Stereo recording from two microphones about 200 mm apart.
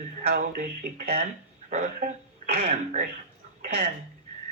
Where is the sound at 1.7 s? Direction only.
35° right (ahead or behind).